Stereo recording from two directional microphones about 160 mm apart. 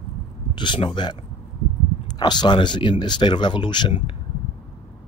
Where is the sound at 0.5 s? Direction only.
30° left (ahead or behind).